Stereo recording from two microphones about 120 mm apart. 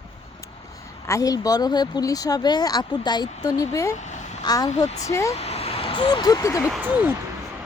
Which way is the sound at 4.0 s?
75° left (ahead or behind).